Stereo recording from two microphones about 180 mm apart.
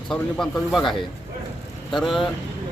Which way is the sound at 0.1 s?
Centre (ahead or behind).